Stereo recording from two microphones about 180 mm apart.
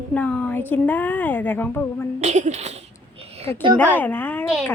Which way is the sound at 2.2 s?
40° right (ahead or behind).